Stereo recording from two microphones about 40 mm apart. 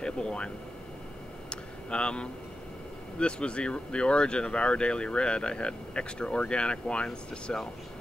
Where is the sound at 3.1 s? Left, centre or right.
Left.